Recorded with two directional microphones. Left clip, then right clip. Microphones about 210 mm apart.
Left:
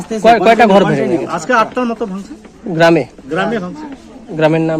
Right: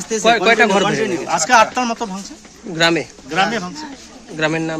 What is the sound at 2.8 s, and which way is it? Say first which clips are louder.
Speech: left 6 dB; 45° left (ahead or behind).